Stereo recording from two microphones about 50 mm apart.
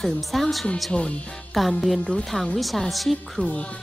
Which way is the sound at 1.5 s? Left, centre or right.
Centre.